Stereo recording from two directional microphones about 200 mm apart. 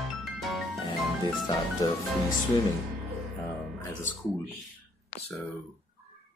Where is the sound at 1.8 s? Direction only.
20° left (ahead or behind).